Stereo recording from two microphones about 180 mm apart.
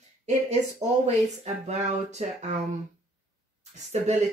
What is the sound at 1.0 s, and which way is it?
Speech, 40° right (ahead or behind).